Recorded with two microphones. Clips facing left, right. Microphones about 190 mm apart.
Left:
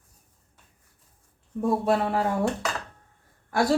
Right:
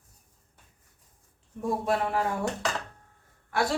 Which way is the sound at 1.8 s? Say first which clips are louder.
Left 3 dB; 35° left (ahead or behind).